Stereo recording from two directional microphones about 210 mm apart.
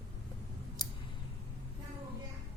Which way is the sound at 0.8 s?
20° left (ahead or behind).